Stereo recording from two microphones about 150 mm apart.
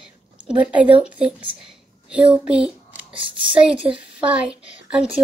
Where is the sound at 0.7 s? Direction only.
10° right (ahead or behind).